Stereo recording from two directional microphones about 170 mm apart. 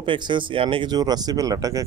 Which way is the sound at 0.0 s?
30° right (ahead or behind).